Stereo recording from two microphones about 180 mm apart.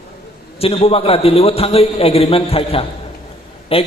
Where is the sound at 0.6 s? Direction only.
35° left (ahead or behind).